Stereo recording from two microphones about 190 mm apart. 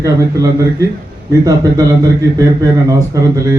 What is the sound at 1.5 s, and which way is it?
A man's voice, 20° right (ahead or behind).